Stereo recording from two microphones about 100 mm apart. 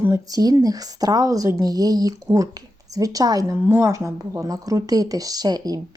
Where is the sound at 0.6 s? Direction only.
40° right (ahead or behind).